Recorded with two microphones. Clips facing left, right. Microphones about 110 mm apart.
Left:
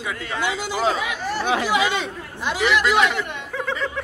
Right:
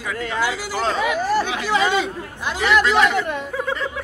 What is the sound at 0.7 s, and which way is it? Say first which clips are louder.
Speech: right 3 dB; 5° left (ahead or behind).